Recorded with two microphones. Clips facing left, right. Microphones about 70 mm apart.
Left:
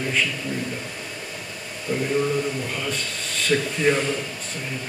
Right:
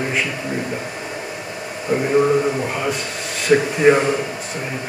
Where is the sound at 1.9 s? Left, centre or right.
Right.